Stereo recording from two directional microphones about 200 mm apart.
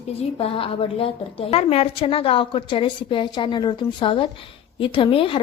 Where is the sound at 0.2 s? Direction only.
30° left (ahead or behind).